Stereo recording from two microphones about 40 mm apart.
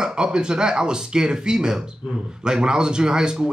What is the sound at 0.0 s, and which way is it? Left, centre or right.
Speech, right.